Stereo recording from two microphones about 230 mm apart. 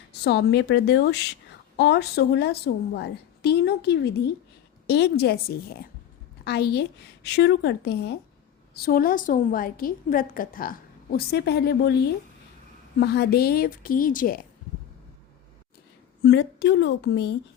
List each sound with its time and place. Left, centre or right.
0.1 s a woman's voice: left
13.0 s a woman's voice: left
16.2 s a woman's voice: left